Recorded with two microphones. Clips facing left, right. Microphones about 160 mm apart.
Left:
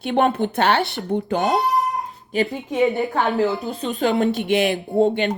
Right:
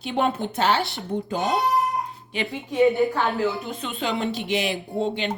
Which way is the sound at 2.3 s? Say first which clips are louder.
Left 2 dB; 45° left (ahead or behind).